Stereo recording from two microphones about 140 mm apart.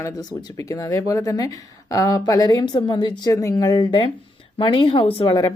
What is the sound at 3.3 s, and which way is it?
A woman's voice, 25° left (ahead or behind).